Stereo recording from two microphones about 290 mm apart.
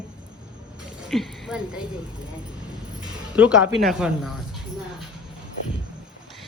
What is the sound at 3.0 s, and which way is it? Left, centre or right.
Speech, centre.